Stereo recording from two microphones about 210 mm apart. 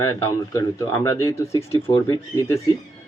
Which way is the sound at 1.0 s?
15° left (ahead or behind).